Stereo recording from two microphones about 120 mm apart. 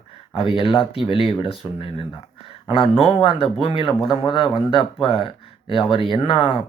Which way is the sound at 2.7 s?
50° left (ahead or behind).